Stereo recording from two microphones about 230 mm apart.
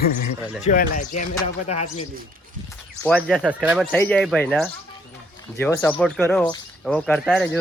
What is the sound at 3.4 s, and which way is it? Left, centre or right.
Speech, centre.